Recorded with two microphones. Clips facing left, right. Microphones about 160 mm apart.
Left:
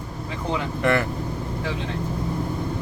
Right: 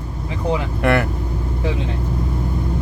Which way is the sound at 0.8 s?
65° right (ahead or behind).